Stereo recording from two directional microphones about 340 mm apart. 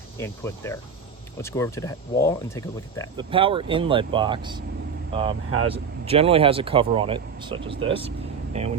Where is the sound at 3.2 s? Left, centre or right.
Centre.